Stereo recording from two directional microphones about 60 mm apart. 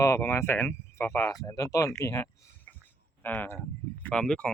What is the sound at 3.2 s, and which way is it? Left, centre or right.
Speech, left.